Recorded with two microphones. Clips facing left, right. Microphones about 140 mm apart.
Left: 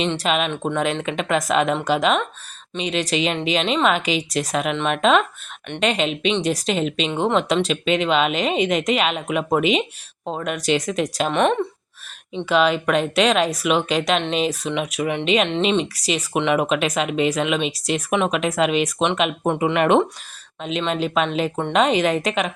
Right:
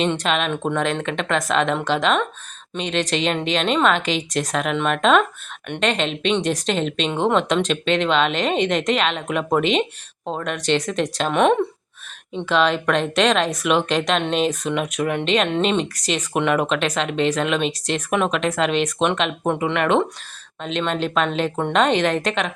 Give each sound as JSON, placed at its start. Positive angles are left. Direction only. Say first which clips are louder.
{"t": 0.2, "sound": "speech", "louder": "even", "side_deg": 5}
{"t": 11.3, "sound": "speech", "louder": "right 3 dB", "side_deg": -5}
{"t": 12.5, "sound": "speech", "louder": "left 1 dB", "side_deg": 5}
{"t": 19.7, "sound": "speech", "louder": "left 3 dB", "side_deg": 20}
{"t": 20.6, "sound": "speech", "louder": "even", "side_deg": 5}